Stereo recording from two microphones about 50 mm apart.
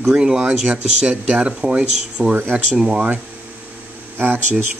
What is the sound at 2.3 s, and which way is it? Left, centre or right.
Speech, right.